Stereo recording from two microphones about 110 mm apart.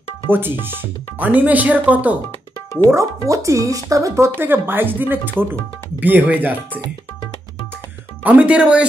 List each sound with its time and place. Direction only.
0.3 s speech: 20° right (ahead or behind)
2.9 s speech: 30° right (ahead or behind)
8.2 s speech: 15° right (ahead or behind)